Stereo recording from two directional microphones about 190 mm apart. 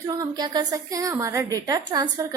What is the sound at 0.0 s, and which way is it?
A woman's voice, 20° right (ahead or behind).